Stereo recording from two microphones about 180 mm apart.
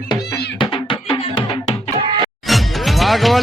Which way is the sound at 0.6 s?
25° left (ahead or behind).